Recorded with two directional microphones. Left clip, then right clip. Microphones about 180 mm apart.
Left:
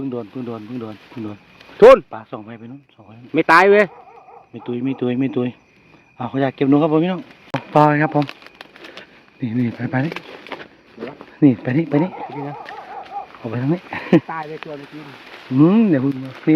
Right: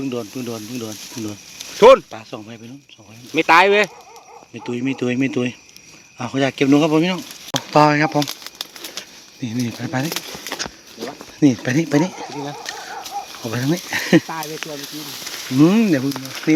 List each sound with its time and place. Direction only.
0.0 s speech: 5° right (ahead or behind)
1.8 s speech: 35° left (ahead or behind)
2.0 s speech: 5° right (ahead or behind)
3.3 s speech: 45° left (ahead or behind)
4.5 s speech: 5° right (ahead or behind)
7.7 s speech: 10° left (ahead or behind)
8.2 s crumpling: 10° right (ahead or behind)
9.4 s speech: 20° left (ahead or behind)
10.1 s a sound: 40° right (ahead or behind)
11.3 s speech: 5° left (ahead or behind)
13.4 s speech: 5° right (ahead or behind)
15.5 s speech: 5° left (ahead or behind)